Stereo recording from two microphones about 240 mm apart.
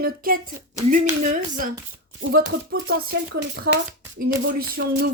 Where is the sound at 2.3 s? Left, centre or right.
Right.